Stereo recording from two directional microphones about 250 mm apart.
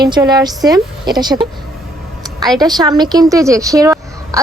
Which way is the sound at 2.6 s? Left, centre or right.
Centre.